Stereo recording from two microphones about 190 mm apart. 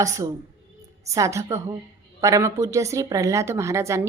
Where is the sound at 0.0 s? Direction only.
15° right (ahead or behind).